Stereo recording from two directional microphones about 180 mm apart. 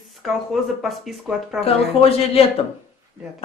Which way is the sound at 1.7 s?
35° left (ahead or behind).